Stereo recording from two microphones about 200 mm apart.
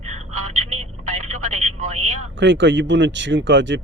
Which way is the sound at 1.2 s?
35° right (ahead or behind).